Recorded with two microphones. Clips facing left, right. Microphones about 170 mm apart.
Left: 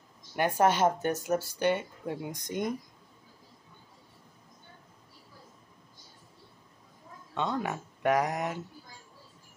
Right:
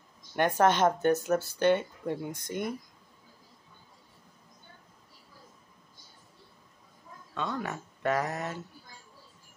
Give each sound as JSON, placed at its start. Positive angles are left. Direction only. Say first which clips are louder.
{"t": 0.4, "sound": "speech", "louder": "right 1 dB", "side_deg": 10}
{"t": 7.3, "sound": "speech", "louder": "left 3 dB", "side_deg": 20}